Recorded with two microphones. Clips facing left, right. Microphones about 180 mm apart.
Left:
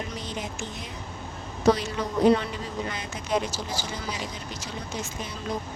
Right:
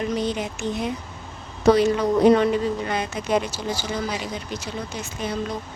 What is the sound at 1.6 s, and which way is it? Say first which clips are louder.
Speech: right 6 dB; 65° right (ahead or behind).